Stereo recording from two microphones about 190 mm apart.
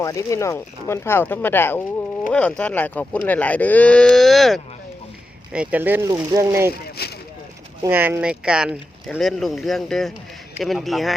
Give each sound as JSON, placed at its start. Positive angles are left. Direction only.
{"t": 0.0, "sound": "speech", "side_deg": 15}
{"t": 7.0, "sound": "vehicle", "side_deg": 55}
{"t": 7.8, "sound": "speech", "side_deg": -10}